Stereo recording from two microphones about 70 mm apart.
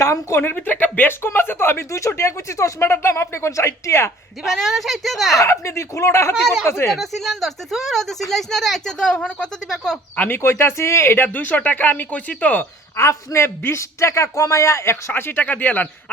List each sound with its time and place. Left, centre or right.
0.0 s speech: left
0.4 s speech: left
4.4 s speech: centre
5.4 s speech: left
6.3 s speech: centre
6.7 s speech: left
7.0 s speech: centre
10.2 s speech: left
11.3 s speech: left
13.0 s speech: left
15.1 s speech: left